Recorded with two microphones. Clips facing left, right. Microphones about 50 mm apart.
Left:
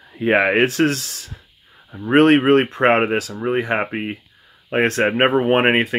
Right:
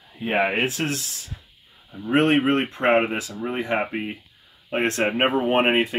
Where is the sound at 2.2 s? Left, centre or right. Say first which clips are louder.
Left 7 dB; left.